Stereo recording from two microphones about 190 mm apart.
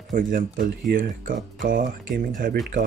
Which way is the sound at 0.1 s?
45° right (ahead or behind).